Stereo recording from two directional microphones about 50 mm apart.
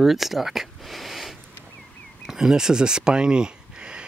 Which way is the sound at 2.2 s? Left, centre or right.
Centre.